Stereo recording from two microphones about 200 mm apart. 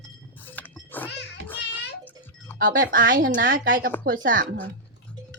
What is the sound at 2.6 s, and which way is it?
Speech, 45° right (ahead or behind).